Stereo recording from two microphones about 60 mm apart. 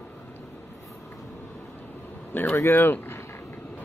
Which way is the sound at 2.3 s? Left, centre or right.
Left.